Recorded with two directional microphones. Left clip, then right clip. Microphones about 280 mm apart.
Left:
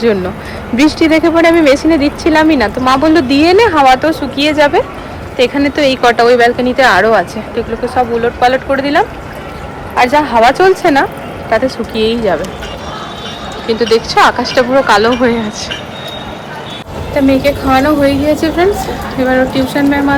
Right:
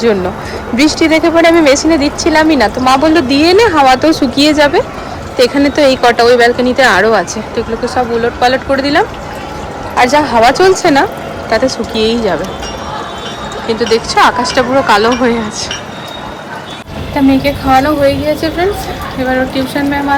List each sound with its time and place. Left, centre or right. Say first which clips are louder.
0.8 s speech: even; centre
4.1 s speech: right 3 dB; right
13.9 s speech: even; centre
17.2 s a woman's voice: left 1 dB; centre